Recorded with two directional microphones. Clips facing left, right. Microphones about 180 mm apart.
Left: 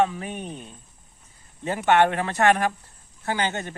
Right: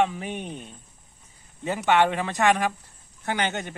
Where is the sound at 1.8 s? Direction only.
50° left (ahead or behind).